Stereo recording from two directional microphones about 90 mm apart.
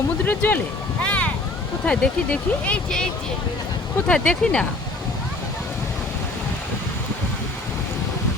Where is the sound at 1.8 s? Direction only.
10° left (ahead or behind).